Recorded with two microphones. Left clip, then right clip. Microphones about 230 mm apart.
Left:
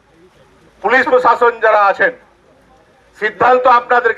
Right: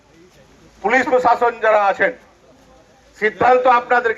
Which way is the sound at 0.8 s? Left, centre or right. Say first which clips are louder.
Left 4 dB; left.